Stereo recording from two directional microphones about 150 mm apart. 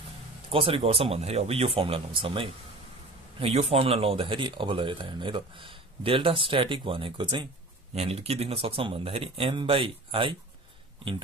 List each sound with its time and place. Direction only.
0.5 s speech: 35° right (ahead or behind)
7.9 s speech: 40° right (ahead or behind)